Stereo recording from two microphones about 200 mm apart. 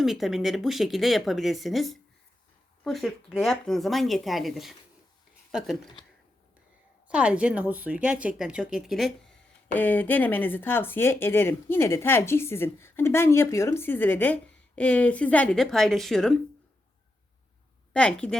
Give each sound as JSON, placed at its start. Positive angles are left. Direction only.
{"t": 0.0, "sound": "speech", "side_deg": 0}
{"t": 7.1, "sound": "speech", "side_deg": -5}
{"t": 17.9, "sound": "speech", "side_deg": 5}